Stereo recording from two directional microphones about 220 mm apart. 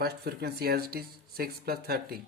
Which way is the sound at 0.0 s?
45° right (ahead or behind).